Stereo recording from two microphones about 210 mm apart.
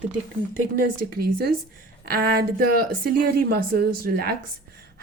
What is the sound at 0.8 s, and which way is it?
A woman's voice, 45° right (ahead or behind).